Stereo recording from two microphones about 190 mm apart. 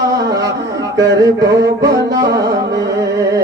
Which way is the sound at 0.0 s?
20° right (ahead or behind).